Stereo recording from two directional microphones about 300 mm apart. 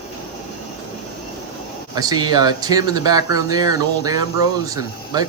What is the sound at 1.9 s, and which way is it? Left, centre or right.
Speech, centre.